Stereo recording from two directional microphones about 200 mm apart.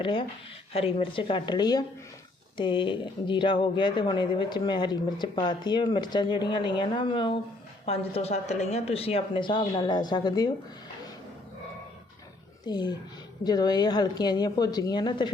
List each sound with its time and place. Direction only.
0.0 s speech: 25° left (ahead or behind)
12.6 s speech: 20° left (ahead or behind)